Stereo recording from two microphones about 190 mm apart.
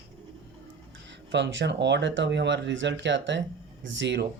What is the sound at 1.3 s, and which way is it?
Speech, 70° right (ahead or behind).